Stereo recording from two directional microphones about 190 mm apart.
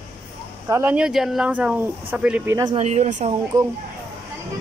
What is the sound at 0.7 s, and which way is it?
Speech, 10° right (ahead or behind).